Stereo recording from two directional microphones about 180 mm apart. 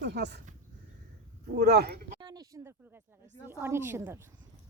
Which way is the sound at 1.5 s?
65° right (ahead or behind).